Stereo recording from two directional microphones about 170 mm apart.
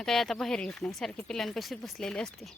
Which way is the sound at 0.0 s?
Centre (ahead or behind).